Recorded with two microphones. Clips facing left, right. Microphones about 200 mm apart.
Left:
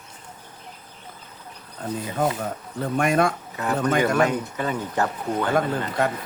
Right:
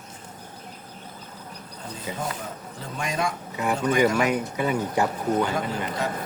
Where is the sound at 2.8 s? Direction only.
60° left (ahead or behind).